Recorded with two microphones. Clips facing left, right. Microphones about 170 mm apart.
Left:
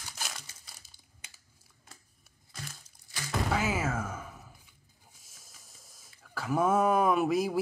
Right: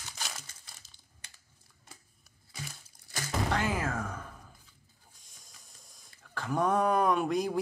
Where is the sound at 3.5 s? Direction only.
5° left (ahead or behind).